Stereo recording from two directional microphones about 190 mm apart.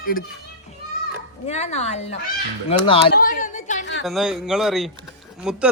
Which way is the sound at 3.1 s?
45° left (ahead or behind).